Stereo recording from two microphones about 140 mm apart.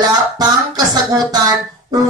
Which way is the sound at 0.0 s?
25° right (ahead or behind).